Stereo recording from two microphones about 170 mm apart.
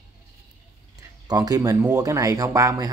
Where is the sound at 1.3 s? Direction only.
20° right (ahead or behind).